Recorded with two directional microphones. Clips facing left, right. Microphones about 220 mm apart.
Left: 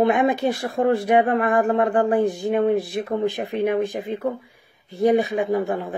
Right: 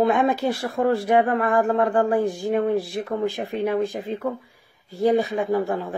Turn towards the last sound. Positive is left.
turn(degrees=20)  # may be behind; listen again after turning